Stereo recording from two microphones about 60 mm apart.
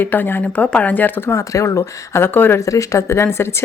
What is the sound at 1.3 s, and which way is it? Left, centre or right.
Speech, left.